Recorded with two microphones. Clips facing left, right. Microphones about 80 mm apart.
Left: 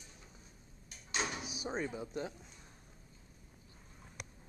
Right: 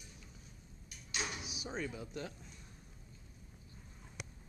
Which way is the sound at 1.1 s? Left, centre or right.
Left.